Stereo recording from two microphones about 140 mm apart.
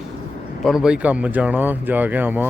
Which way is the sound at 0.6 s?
5° right (ahead or behind).